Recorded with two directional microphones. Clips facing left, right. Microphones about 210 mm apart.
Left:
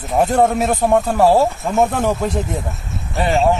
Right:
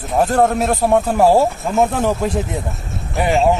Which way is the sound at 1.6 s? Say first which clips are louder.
Even; centre (ahead or behind).